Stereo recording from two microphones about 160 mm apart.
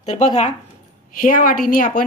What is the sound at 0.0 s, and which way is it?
Speech, 45° left (ahead or behind).